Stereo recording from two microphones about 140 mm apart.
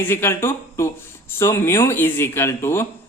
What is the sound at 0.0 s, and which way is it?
A woman's voice, 15° left (ahead or behind).